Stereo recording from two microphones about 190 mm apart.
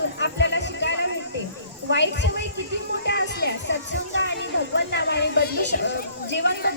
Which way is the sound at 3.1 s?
65° left (ahead or behind).